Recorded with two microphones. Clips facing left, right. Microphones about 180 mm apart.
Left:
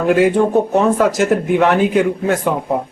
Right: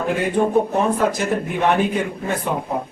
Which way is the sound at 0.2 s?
90° left.